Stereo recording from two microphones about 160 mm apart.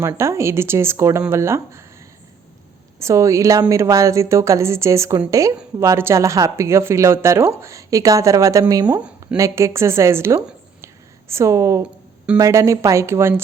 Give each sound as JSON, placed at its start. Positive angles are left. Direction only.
{"t": 0.0, "sound": "a woman's voice", "side_deg": -15}
{"t": 3.0, "sound": "a woman's voice", "side_deg": -20}
{"t": 11.8, "sound": "music", "side_deg": -5}
{"t": 12.4, "sound": "a woman's voice", "side_deg": -20}